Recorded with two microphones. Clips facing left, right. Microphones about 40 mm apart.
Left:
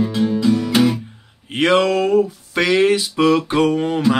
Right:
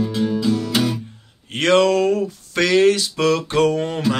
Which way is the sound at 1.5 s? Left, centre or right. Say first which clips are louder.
Even; centre.